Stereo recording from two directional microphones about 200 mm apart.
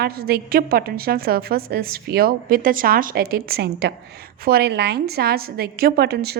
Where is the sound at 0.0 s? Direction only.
50° right (ahead or behind).